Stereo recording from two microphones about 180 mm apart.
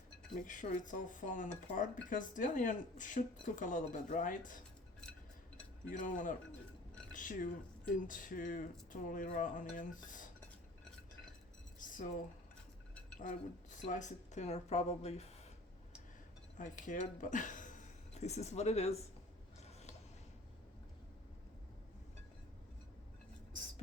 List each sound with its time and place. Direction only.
0.4 s speech: 45° left (ahead or behind)
5.9 s speech: 45° left (ahead or behind)
11.8 s a sound: 45° left (ahead or behind)
13.1 s speech: 45° left (ahead or behind)
16.6 s speech: 45° left (ahead or behind)
19.6 s a sound: 40° left (ahead or behind)